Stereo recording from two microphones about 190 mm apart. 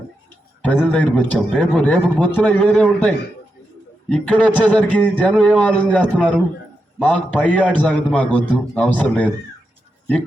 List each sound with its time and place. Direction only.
0.6 s a man's voice: 10° left (ahead or behind)
7.4 s a man's voice: 5° left (ahead or behind)